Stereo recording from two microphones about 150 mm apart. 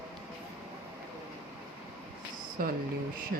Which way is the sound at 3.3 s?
90° right.